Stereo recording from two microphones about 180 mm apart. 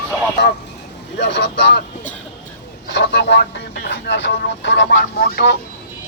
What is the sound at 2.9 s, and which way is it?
Speech, 75° left (ahead or behind).